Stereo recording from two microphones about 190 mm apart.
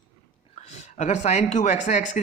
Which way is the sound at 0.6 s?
40° left (ahead or behind).